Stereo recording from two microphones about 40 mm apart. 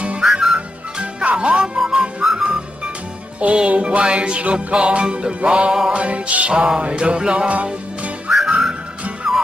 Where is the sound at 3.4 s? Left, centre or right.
Right.